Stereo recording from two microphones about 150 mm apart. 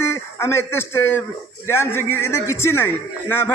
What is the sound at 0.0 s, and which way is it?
A man's voice, 20° left (ahead or behind).